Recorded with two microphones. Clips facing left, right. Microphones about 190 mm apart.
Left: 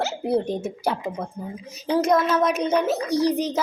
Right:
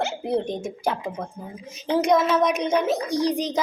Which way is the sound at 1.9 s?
Centre (ahead or behind).